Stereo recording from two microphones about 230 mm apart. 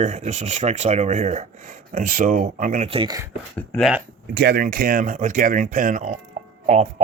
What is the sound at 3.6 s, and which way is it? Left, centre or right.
Speech, centre.